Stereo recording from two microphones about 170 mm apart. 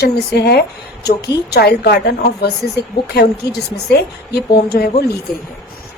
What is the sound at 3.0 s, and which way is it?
A woman's voice, 75° left (ahead or behind).